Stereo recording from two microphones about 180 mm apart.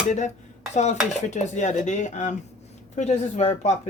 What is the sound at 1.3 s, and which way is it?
Speech, 40° left (ahead or behind).